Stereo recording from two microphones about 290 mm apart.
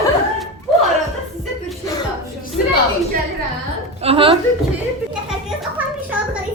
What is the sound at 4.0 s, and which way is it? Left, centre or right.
Speech, centre.